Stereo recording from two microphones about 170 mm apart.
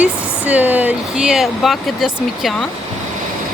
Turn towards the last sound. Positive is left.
turn(degrees=0)  # may be behind; listen again after turning